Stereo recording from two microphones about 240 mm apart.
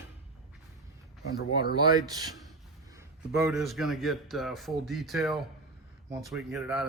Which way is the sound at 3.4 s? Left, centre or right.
Centre.